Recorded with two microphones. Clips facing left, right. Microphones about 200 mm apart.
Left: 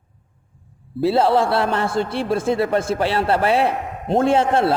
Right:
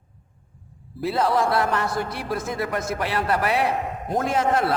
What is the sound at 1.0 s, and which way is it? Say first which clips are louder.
A man's voice: left 5 dB; 30° left (ahead or behind).